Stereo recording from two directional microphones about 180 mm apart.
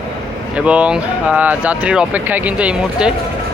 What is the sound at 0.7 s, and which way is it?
Speech, 5° right (ahead or behind).